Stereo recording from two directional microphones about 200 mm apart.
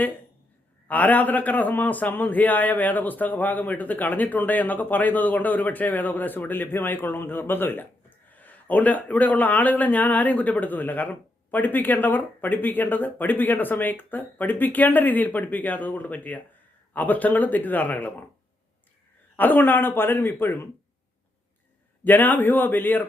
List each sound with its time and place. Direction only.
0.9 s a man's voice: 10° left (ahead or behind)
19.4 s a man's voice: 10° left (ahead or behind)
22.0 s a man's voice: 10° left (ahead or behind)